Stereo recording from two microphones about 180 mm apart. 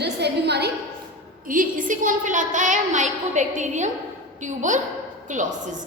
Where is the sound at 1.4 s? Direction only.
50° right (ahead or behind).